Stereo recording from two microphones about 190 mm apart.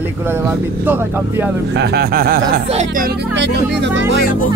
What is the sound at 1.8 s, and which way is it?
Speech, 55° right (ahead or behind).